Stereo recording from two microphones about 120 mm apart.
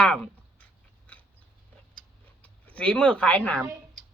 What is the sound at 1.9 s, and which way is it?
Tick-tock, 10° left (ahead or behind).